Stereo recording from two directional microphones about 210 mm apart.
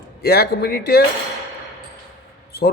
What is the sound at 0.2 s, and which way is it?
Speech, 50° left (ahead or behind).